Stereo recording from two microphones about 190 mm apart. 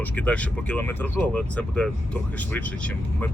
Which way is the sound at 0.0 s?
10° left (ahead or behind).